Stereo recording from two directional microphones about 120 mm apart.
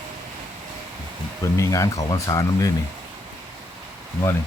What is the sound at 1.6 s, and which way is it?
Speech, 25° left (ahead or behind).